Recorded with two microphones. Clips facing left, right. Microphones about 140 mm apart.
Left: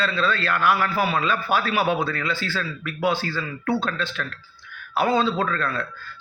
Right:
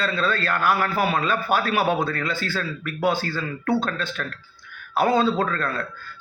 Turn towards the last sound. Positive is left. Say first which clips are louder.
# even
turn(degrees=-45)  # may be behind; listen again after turning